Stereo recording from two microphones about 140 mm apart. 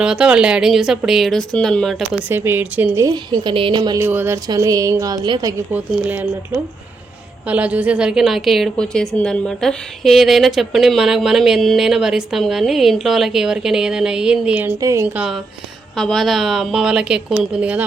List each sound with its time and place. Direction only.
0.0 s a woman's voice: 5° right (ahead or behind)
2.3 s speech: 15° right (ahead or behind)
3.0 s a woman's voice: 30° right (ahead or behind)
4.0 s a woman's voice: 15° right (ahead or behind)
5.7 s speech: 10° right (ahead or behind)
7.4 s a woman's voice: 10° right (ahead or behind)
14.8 s a woman's voice: 25° right (ahead or behind)
15.0 s a woman's voice: 10° right (ahead or behind)